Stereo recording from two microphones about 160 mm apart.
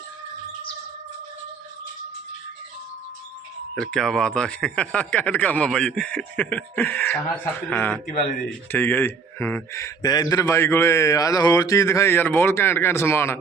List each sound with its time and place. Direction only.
3.8 s speech: 5° left (ahead or behind)